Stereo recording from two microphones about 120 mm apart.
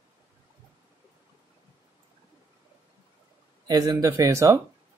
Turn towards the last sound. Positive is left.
turn(degrees=-25)  # may be behind; listen again after turning